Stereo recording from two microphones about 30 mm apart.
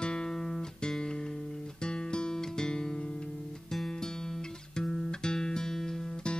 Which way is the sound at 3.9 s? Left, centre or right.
Left.